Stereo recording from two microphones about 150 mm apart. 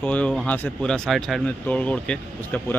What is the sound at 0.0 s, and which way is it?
Speech, 10° left (ahead or behind).